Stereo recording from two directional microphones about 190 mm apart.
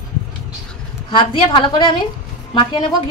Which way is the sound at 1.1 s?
25° left (ahead or behind).